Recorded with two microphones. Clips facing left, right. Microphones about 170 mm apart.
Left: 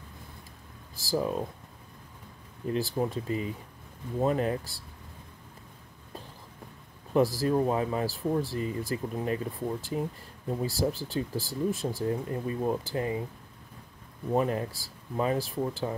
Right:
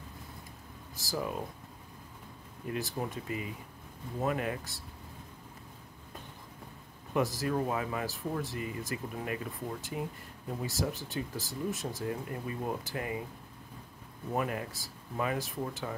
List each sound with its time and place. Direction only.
0.9 s speech: 30° left (ahead or behind)
2.7 s speech: 30° left (ahead or behind)
7.2 s speech: 30° left (ahead or behind)
14.3 s speech: 30° left (ahead or behind)